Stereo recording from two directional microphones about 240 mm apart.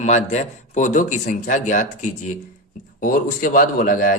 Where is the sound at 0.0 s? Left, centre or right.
Left.